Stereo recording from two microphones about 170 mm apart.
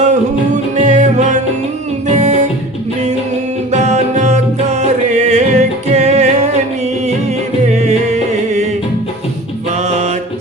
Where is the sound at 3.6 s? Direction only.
40° right (ahead or behind).